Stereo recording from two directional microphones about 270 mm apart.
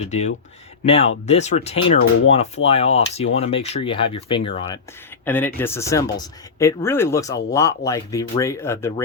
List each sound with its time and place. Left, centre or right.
0.1 s speech: left
5.2 s speech: centre